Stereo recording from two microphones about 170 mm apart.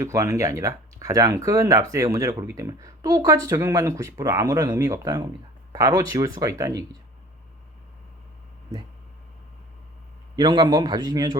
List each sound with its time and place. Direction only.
0.0 s speech: 20° right (ahead or behind)
10.3 s speech: 25° right (ahead or behind)